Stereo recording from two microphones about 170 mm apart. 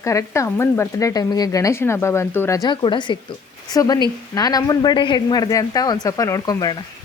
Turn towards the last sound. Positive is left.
turn(degrees=20)  # may be behind; listen again after turning